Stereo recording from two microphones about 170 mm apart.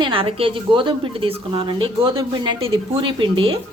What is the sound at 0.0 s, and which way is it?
A woman's voice, 30° right (ahead or behind).